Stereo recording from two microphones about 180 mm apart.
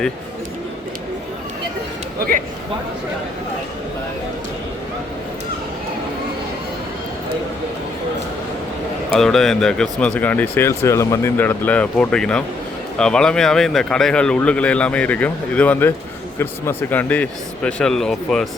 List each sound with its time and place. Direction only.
2.1 s a man's voice: 55° right (ahead or behind)
9.1 s a man's voice: centre (ahead or behind)